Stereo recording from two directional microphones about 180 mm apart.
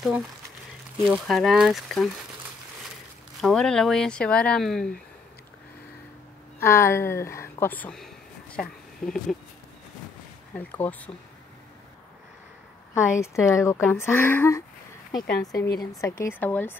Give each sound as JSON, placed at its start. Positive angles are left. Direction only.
{"t": 1.0, "sound": "speech", "side_deg": -5}
{"t": 3.3, "sound": "speech", "side_deg": 0}
{"t": 6.6, "sound": "speech", "side_deg": 15}
{"t": 10.5, "sound": "speech", "side_deg": 10}
{"t": 12.9, "sound": "speech", "side_deg": 15}